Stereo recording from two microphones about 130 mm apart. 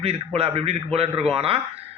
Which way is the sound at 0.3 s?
50° right (ahead or behind).